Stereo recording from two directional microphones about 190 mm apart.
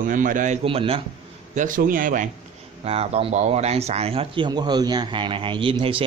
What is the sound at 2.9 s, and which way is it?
Speech, 30° right (ahead or behind).